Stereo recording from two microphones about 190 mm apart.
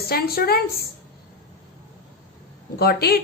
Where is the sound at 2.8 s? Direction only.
55° left (ahead or behind).